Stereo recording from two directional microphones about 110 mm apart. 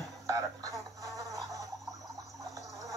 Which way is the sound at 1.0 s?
30° right (ahead or behind).